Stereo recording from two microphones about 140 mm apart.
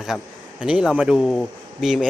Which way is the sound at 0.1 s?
Centre (ahead or behind).